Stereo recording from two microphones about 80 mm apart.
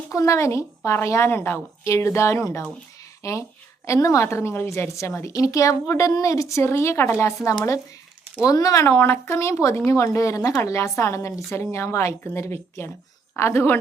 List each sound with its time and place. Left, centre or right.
0.1 s a woman's voice: left
1.5 s a woman's voice: left
8.8 s a woman's voice: left